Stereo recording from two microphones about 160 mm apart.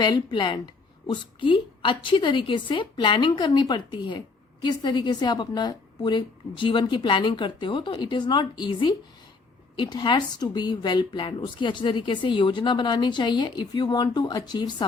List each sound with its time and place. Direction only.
0.0 s a woman's voice: 30° left (ahead or behind)